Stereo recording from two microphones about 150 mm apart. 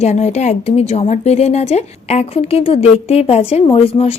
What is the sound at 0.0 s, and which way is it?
Speech, 50° left (ahead or behind).